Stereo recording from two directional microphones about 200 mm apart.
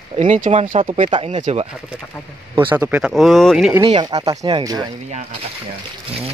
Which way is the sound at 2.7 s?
10° right (ahead or behind).